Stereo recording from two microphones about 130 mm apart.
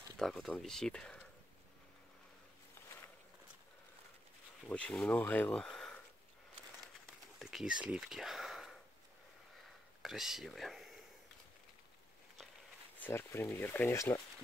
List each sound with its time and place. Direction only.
0.2 s speech: 5° left (ahead or behind)
4.6 s speech: 10° left (ahead or behind)
7.3 s a sound: centre (ahead or behind)
10.0 s speech: 5° right (ahead or behind)
13.0 s speech: 15° left (ahead or behind)